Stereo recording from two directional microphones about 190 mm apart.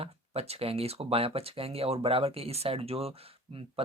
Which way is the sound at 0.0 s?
30° right (ahead or behind).